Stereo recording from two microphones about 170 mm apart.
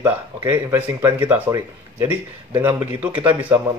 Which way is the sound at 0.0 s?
15° right (ahead or behind).